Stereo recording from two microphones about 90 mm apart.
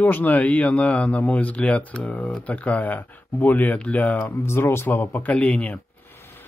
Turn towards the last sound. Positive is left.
turn(degrees=15)  # may be behind; listen again after turning